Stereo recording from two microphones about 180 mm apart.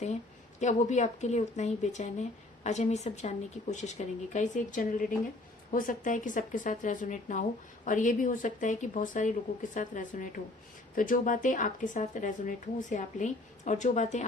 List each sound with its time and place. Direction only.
0.6 s a woman's voice: 40° left (ahead or behind)